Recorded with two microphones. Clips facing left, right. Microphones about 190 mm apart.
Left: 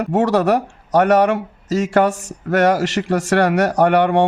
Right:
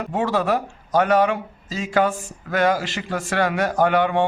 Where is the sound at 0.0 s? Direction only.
75° left (ahead or behind).